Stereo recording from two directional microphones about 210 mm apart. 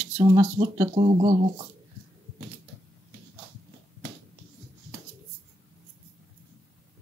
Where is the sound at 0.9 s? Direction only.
30° right (ahead or behind).